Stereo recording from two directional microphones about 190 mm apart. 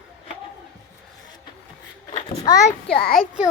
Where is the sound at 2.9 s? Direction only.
55° left (ahead or behind).